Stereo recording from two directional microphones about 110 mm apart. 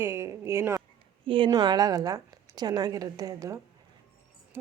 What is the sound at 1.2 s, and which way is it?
Speech, 55° right (ahead or behind).